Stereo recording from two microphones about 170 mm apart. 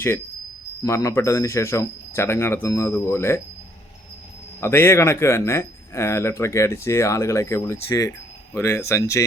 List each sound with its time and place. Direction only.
0.9 s speech: 15° left (ahead or behind)
4.6 s speech: 15° left (ahead or behind)